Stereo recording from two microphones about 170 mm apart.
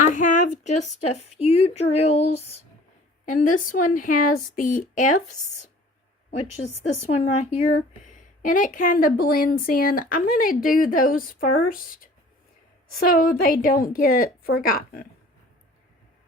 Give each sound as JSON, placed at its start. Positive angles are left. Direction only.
{"t": 0.1, "sound": "speech", "side_deg": 50}
{"t": 3.2, "sound": "speech", "side_deg": 50}
{"t": 6.3, "sound": "speech", "side_deg": 40}
{"t": 13.0, "sound": "speech", "side_deg": 60}